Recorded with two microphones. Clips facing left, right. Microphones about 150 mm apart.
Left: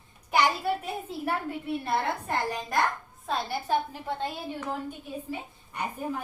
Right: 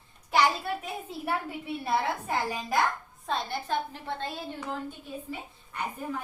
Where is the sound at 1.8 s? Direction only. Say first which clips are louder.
Right 3 dB; 5° right (ahead or behind); by 4.3 s 10° left (ahead or behind).